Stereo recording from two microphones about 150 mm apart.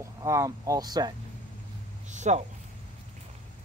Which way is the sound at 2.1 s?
50° right (ahead or behind).